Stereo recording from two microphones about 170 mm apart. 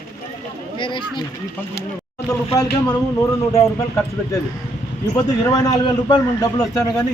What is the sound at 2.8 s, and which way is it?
A man's voice, 20° left (ahead or behind).